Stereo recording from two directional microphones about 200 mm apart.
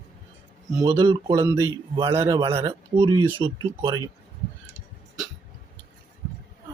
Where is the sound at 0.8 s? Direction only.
25° right (ahead or behind).